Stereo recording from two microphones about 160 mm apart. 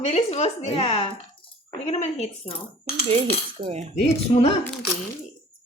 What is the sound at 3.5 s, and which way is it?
Cutlery, 40° right (ahead or behind).